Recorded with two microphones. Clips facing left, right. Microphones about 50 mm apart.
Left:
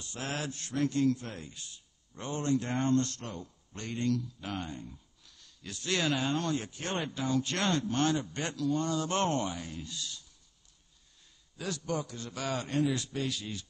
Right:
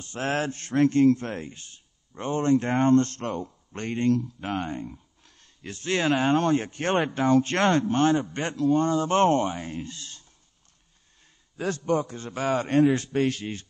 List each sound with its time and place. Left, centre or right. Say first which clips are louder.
0.0 s speech: right 9 dB; right
11.5 s speech: right 9 dB; right